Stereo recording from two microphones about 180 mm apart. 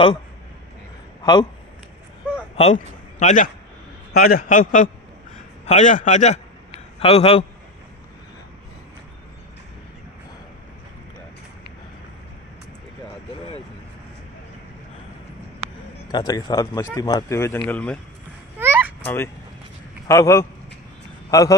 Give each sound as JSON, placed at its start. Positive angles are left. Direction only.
{"t": 1.2, "sound": "a man's voice", "side_deg": 25}
{"t": 2.5, "sound": "a man's voice", "side_deg": 35}
{"t": 4.2, "sound": "a man's voice", "side_deg": 55}
{"t": 16.1, "sound": "speech", "side_deg": 20}
{"t": 18.6, "sound": "a sound", "side_deg": -15}
{"t": 19.0, "sound": "a man's voice", "side_deg": 10}